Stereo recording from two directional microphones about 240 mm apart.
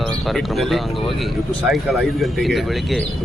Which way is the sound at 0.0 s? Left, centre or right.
Centre.